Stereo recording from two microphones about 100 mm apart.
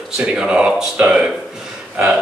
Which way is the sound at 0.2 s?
5° right (ahead or behind).